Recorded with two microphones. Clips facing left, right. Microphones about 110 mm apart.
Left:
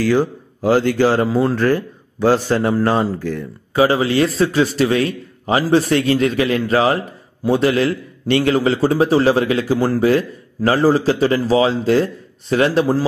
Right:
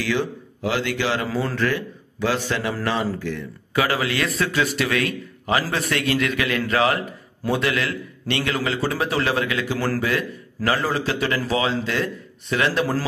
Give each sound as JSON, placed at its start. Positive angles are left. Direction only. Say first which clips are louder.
{"t": 0.0, "sound": "speech", "louder": "left 8 dB", "side_deg": 40}